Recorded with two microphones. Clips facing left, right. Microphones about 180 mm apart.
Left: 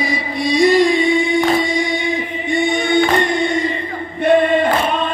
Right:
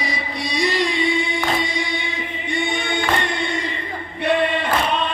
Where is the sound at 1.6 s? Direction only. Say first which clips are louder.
Left 7 dB; 45° left (ahead or behind).